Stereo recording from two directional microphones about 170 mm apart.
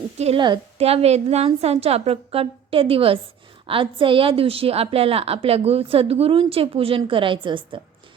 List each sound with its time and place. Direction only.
0.2 s a woman's voice: 35° right (ahead or behind)